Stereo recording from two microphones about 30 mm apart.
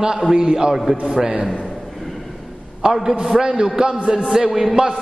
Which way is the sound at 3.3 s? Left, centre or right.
Right.